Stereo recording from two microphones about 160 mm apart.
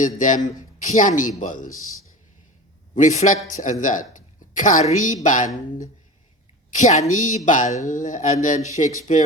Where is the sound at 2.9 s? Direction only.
50° left (ahead or behind).